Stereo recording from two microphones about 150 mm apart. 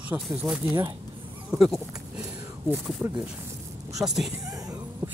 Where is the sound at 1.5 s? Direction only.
Centre (ahead or behind).